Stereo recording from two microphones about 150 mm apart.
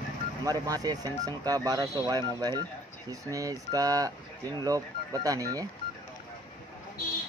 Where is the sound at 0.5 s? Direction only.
25° right (ahead or behind).